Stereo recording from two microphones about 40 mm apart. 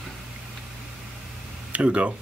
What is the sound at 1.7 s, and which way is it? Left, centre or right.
Speech, right.